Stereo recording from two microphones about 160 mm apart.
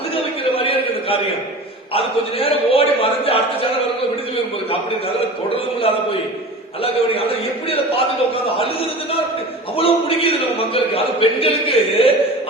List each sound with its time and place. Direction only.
0.2 s a sound: 35° left (ahead or behind)
2.4 s a man's voice: 35° left (ahead or behind)
6.8 s a man's voice: 35° left (ahead or behind)
9.7 s a man's voice: 35° left (ahead or behind)